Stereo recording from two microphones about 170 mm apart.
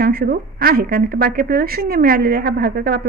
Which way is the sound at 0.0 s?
65° right (ahead or behind).